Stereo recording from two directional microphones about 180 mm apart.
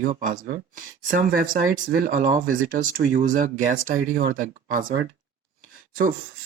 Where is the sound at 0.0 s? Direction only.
50° right (ahead or behind).